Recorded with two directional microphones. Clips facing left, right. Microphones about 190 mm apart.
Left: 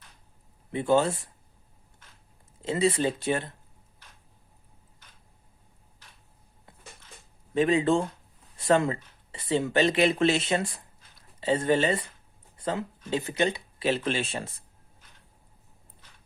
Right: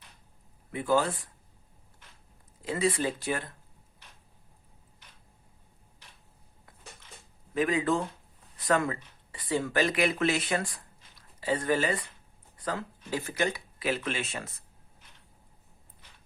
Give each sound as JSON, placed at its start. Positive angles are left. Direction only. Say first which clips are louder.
{"t": 0.7, "sound": "speech", "louder": "left 3 dB", "side_deg": 25}
{"t": 2.6, "sound": "speech", "louder": "left 3 dB", "side_deg": 25}
{"t": 7.5, "sound": "speech", "louder": "left 4 dB", "side_deg": 25}